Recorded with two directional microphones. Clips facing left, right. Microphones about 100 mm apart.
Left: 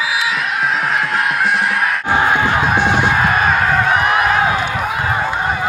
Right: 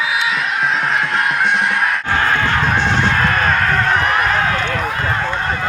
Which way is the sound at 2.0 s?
15° left (ahead or behind).